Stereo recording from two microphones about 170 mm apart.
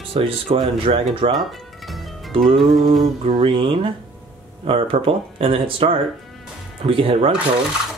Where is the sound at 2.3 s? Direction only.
30° right (ahead or behind).